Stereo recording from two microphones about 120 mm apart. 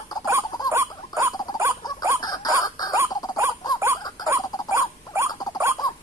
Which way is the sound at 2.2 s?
35° left (ahead or behind).